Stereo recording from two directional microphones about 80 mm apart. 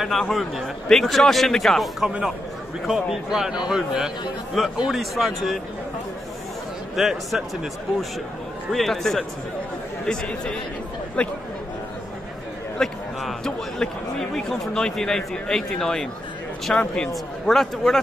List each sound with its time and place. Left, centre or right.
0.0 s a man's voice: centre
2.0 s a man's voice: centre
7.0 s a man's voice: centre
8.7 s a man's voice: centre
12.7 s a man's voice: centre